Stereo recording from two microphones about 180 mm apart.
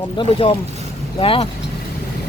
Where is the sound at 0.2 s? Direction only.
30° left (ahead or behind).